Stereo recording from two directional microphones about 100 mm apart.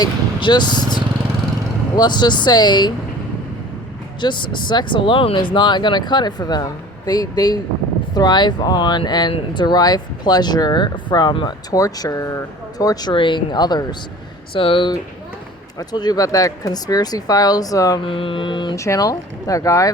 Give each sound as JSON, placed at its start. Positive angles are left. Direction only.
{"t": 0.0, "sound": "speech", "side_deg": 50}
{"t": 4.2, "sound": "speech", "side_deg": 50}
{"t": 11.8, "sound": "speech", "side_deg": 35}
{"t": 13.1, "sound": "speech", "side_deg": 55}
{"t": 14.5, "sound": "mantra", "side_deg": 65}
{"t": 15.8, "sound": "speech", "side_deg": 40}
{"t": 18.0, "sound": "mantra", "side_deg": 60}
{"t": 18.8, "sound": "speech", "side_deg": 35}